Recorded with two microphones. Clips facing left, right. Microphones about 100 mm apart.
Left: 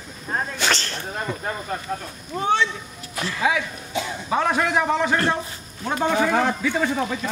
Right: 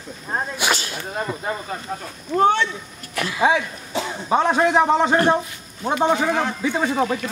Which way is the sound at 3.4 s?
30° right (ahead or behind).